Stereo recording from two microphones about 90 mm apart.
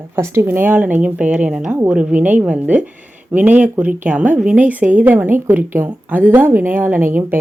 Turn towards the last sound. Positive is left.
turn(degrees=-25)  # may be behind; listen again after turning